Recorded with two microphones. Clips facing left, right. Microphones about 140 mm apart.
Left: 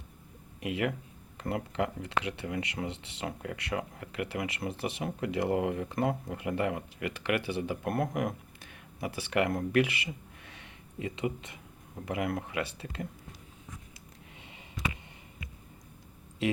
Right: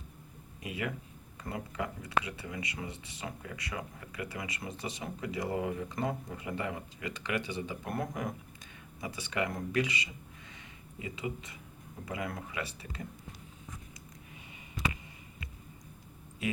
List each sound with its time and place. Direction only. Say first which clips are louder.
0.6 s speech: left 6 dB; 65° left (ahead or behind)